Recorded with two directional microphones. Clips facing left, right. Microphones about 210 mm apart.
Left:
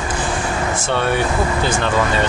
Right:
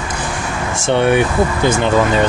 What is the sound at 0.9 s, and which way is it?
Speech, 20° right (ahead or behind).